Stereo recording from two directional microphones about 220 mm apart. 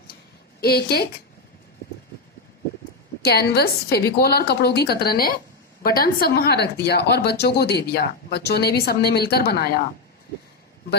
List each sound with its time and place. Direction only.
0.6 s speech: 45° left (ahead or behind)
3.2 s speech: 45° left (ahead or behind)